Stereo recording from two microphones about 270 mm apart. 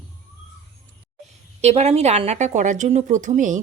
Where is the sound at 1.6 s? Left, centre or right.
Right.